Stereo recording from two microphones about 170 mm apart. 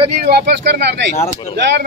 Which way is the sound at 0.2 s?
70° right (ahead or behind).